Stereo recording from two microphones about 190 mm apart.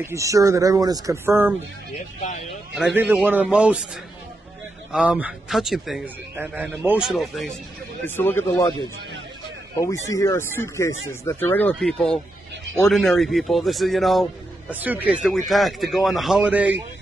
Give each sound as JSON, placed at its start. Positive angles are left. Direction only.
{"t": 0.0, "sound": "speech", "side_deg": -15}
{"t": 2.8, "sound": "speech", "side_deg": -5}
{"t": 8.2, "sound": "speech", "side_deg": 10}
{"t": 9.8, "sound": "speech", "side_deg": 15}